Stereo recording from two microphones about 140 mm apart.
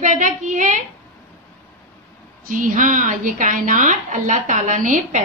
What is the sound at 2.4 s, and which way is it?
A woman's voice, 75° right (ahead or behind).